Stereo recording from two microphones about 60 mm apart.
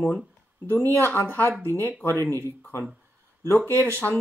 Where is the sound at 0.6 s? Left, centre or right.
Left.